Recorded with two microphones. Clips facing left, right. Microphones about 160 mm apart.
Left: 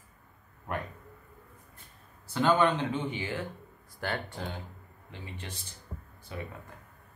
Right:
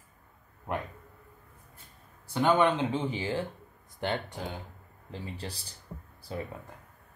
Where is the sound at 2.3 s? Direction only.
20° right (ahead or behind).